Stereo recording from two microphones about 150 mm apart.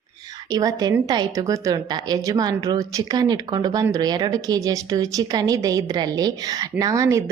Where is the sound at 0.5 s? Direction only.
25° right (ahead or behind).